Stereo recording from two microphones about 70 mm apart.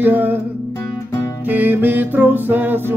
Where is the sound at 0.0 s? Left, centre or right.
Right.